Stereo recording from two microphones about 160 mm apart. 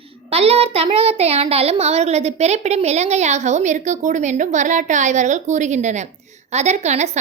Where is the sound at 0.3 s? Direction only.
40° right (ahead or behind).